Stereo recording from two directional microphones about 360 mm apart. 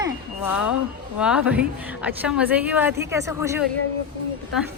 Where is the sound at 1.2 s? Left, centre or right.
Centre.